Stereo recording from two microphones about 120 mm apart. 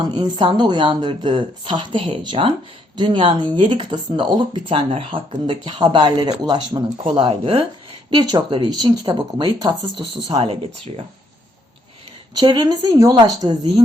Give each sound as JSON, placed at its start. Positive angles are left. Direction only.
{"t": 0.1, "sound": "speech", "side_deg": -35}
{"t": 8.1, "sound": "speech", "side_deg": -35}
{"t": 12.4, "sound": "speech", "side_deg": -35}